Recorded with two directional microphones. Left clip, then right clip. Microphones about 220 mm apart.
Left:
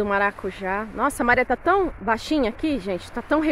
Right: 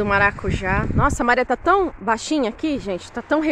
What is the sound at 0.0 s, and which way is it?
Speech, 10° right (ahead or behind).